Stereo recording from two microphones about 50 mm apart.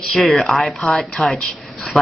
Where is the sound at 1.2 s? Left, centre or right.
Left.